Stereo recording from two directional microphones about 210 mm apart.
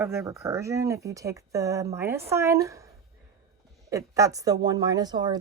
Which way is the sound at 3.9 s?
15° right (ahead or behind).